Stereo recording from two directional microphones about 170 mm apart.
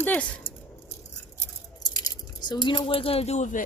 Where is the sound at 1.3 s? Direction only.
25° left (ahead or behind).